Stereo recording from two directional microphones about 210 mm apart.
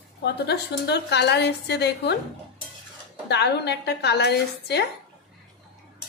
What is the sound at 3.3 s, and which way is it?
A woman's voice, 55° left (ahead or behind).